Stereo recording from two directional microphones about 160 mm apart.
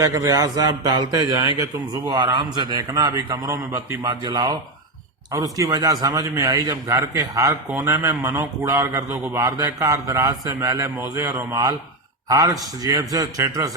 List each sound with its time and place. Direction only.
0.0 s a man's voice: 20° right (ahead or behind)